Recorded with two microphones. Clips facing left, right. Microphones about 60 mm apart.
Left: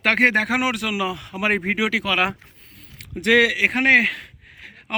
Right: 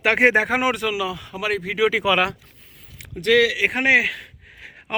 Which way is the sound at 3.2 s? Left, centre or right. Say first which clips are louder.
Even; centre.